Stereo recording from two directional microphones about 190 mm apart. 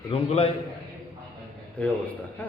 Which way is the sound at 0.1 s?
30° left (ahead or behind).